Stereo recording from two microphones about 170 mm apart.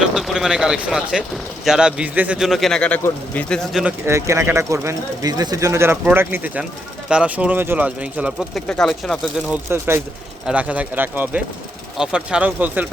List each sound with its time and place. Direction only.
0.0 s a man's voice: 5° right (ahead or behind)
4.0 s speech: 15° right (ahead or behind)
8.6 s a man's voice: 5° left (ahead or behind)
9.5 s speech: 15° right (ahead or behind)